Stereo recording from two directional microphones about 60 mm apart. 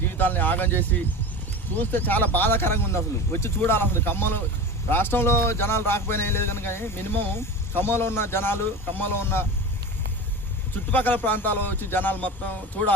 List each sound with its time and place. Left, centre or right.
0.2 s speech: left
10.9 s speech: left